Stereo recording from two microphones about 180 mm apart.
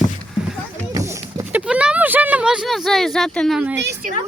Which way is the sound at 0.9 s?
15° right (ahead or behind).